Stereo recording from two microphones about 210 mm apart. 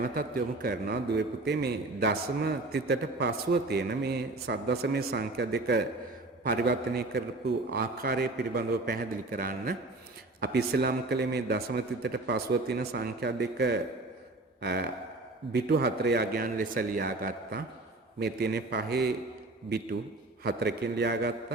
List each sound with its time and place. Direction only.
0.0 s a man's voice: 45° right (ahead or behind)
20.4 s a man's voice: 50° right (ahead or behind)